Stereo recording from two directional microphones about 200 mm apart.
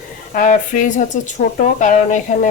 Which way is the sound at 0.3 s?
40° left (ahead or behind).